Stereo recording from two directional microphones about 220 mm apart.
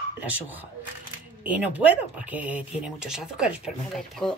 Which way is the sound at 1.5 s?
5° right (ahead or behind).